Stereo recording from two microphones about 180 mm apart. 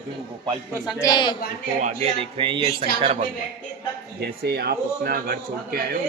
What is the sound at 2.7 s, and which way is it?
Speech, 55° left (ahead or behind).